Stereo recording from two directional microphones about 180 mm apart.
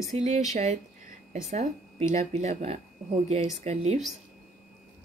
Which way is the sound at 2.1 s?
40° right (ahead or behind).